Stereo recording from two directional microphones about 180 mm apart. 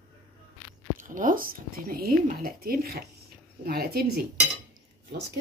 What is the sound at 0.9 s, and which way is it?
Speech, 50° right (ahead or behind).